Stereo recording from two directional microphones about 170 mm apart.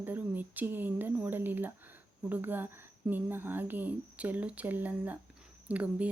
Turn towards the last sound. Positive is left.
turn(degrees=-10)  # may be behind; listen again after turning